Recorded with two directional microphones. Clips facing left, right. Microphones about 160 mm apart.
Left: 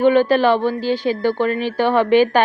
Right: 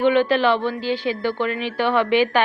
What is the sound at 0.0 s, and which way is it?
A woman's voice, 40° left (ahead or behind).